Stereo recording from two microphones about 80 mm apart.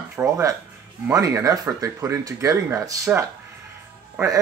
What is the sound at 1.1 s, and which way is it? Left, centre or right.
Speech, right.